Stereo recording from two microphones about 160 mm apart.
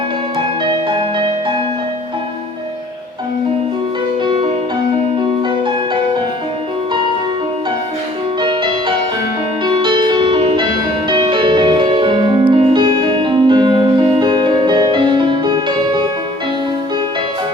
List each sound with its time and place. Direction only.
0.6 s music: 30° right (ahead or behind)
5.4 s music: 30° right (ahead or behind)
8.4 s music: 30° right (ahead or behind)